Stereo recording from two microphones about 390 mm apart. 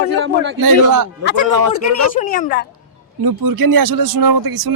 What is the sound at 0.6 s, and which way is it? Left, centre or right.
Speech, right.